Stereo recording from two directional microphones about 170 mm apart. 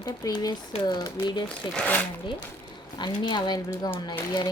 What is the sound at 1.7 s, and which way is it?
Speech, 10° left (ahead or behind).